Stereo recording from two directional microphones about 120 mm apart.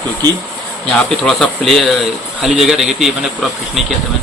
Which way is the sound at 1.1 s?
5° left (ahead or behind).